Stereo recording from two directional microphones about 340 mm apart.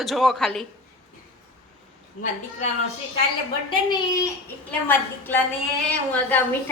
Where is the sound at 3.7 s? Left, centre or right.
Centre.